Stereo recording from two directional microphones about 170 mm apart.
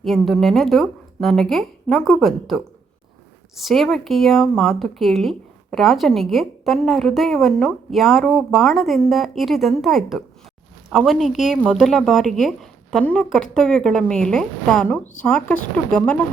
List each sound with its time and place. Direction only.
0.0 s speech: centre (ahead or behind)